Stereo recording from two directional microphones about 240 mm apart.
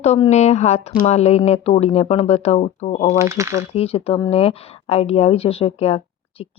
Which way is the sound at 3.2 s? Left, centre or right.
Centre.